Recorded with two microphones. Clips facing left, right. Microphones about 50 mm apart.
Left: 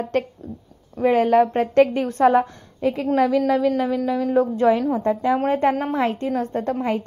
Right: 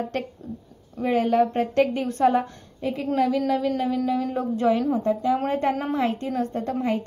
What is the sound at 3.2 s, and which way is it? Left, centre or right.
Speech, left.